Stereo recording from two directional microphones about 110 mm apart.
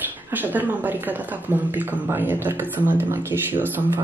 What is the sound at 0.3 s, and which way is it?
A woman's voice, 15° right (ahead or behind).